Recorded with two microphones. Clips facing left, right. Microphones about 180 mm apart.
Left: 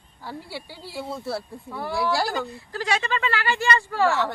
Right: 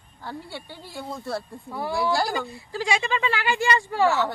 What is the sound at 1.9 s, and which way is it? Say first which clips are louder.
Speech: even; centre (ahead or behind).